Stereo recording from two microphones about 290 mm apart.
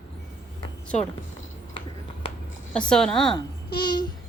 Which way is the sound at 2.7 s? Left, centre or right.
Centre.